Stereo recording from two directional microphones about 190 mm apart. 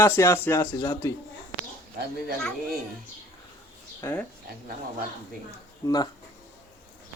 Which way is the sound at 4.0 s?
10° left (ahead or behind).